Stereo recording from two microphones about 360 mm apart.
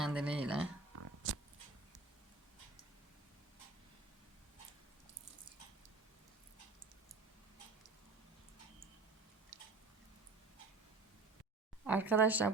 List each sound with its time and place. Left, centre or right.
0.0 s speech: centre
0.9 s a sound: right
11.9 s speech: centre